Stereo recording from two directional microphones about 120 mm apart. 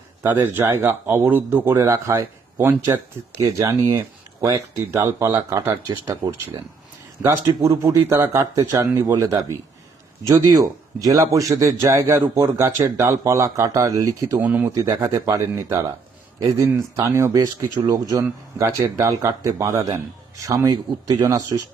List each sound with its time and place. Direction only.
0.2 s speech: 20° right (ahead or behind)
1.7 s speech: 25° right (ahead or behind)
7.2 s a man's voice: 15° right (ahead or behind)
7.8 s speech: 30° right (ahead or behind)
14.4 s a man's voice: 15° right (ahead or behind)
14.8 s speech: 25° right (ahead or behind)